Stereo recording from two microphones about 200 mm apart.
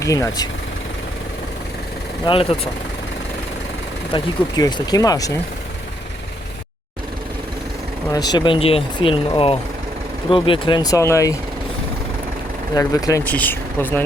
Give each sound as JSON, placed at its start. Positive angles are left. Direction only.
{"t": 0.0, "sound": "speech", "side_deg": 15}
{"t": 2.2, "sound": "speech", "side_deg": 30}
{"t": 4.1, "sound": "speech", "side_deg": 20}
{"t": 8.1, "sound": "speech", "side_deg": 20}
{"t": 12.7, "sound": "speech", "side_deg": 15}